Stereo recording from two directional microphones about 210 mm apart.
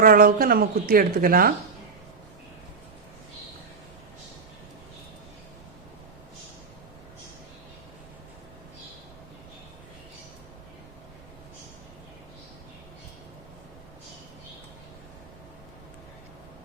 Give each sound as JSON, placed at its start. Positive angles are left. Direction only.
{"t": 0.0, "sound": "speech", "side_deg": -45}